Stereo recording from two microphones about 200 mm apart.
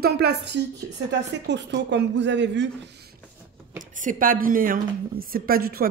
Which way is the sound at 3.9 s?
40° right (ahead or behind).